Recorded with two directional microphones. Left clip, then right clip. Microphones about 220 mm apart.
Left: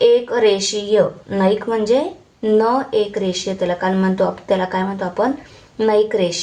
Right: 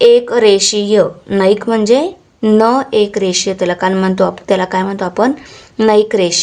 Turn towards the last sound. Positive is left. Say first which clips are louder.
# right 5 dB
turn(degrees=-45)  # may be behind; listen again after turning